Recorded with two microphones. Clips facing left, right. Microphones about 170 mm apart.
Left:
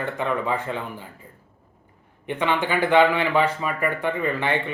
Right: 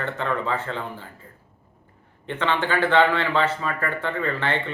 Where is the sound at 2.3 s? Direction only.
15° left (ahead or behind).